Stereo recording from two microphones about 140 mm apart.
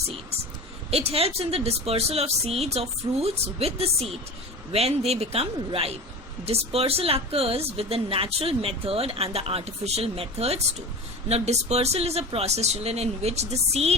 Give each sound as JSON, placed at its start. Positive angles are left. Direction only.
{"t": 0.9, "sound": "speech", "side_deg": -45}